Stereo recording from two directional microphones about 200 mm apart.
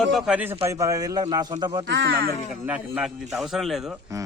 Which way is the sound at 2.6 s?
5° right (ahead or behind).